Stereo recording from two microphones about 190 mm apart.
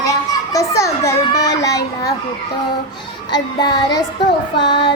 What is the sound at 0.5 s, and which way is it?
A child's voice, 15° left (ahead or behind).